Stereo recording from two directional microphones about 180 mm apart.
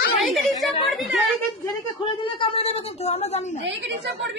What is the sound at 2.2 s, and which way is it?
A woman's voice, 30° left (ahead or behind).